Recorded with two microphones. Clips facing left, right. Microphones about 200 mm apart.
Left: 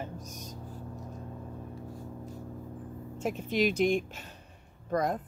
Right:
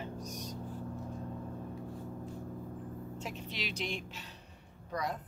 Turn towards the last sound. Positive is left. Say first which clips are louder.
# left 8 dB
turn(degrees=50)  # may be behind; listen again after turning